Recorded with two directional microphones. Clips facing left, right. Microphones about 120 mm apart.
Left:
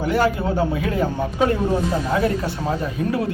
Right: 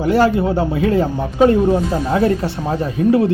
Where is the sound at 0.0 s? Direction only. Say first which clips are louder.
Right 5 dB; 30° right (ahead or behind).